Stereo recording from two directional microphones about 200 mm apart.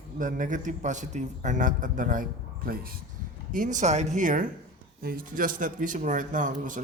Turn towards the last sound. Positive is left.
turn(degrees=-40)  # may be behind; listen again after turning